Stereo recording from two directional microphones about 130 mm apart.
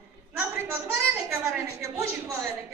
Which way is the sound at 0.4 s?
20° right (ahead or behind).